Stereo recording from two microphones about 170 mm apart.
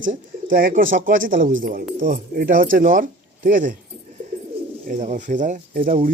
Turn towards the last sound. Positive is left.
turn(degrees=-55)  # may be behind; listen again after turning